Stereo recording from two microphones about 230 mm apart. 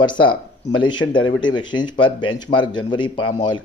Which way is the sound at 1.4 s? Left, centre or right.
Centre.